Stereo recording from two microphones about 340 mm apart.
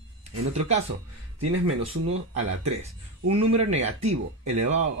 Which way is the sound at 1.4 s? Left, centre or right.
Right.